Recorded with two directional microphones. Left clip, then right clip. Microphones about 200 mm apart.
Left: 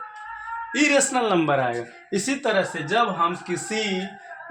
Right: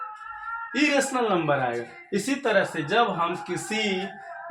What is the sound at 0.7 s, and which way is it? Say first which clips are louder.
Speech: left 3 dB; 35° left (ahead or behind).